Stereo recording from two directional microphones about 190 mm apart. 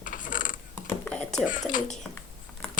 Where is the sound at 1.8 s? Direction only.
Centre (ahead or behind).